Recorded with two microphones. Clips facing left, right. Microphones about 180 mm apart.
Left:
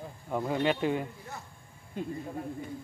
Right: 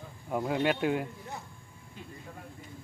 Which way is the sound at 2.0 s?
50° left (ahead or behind).